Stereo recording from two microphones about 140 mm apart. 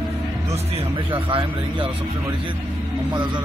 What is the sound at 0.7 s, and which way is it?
Speech, 40° right (ahead or behind).